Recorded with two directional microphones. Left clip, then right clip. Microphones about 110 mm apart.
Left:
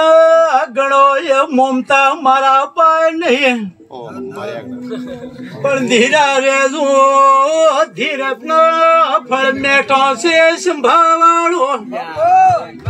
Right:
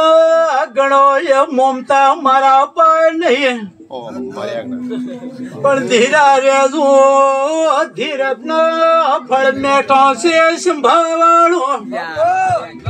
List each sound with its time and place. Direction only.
0.0 s speech: 20° right (ahead or behind)
5.6 s speech: 10° right (ahead or behind)